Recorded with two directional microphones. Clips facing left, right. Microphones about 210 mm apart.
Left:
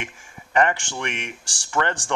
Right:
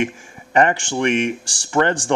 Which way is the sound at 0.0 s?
25° right (ahead or behind).